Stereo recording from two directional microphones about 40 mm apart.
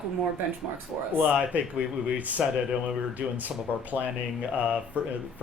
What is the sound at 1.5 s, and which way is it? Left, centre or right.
Speech, right.